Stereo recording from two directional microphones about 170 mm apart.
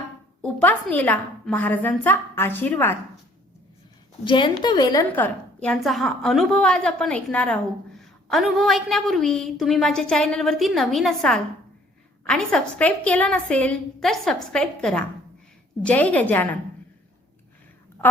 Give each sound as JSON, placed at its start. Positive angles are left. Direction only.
{"t": 0.4, "sound": "a woman's voice", "side_deg": 10}
{"t": 4.2, "sound": "a woman's voice", "side_deg": 30}
{"t": 5.0, "sound": "a woman's voice", "side_deg": 10}